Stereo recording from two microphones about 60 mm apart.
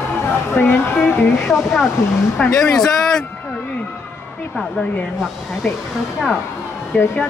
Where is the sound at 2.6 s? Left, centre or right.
Centre.